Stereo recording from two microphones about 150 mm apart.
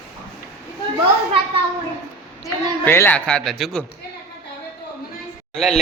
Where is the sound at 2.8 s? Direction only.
15° left (ahead or behind).